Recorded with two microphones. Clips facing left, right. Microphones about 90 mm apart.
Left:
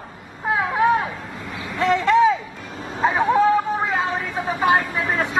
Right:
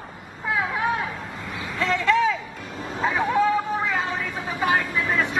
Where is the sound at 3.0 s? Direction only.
40° left (ahead or behind).